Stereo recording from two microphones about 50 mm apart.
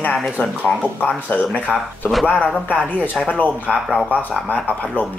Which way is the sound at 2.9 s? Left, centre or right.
Left.